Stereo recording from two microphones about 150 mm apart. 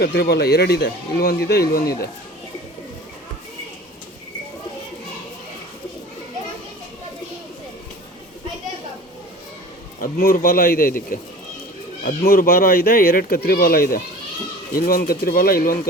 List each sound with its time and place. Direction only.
0.0 s speech: 90° left
10.0 s speech: 75° left (ahead or behind)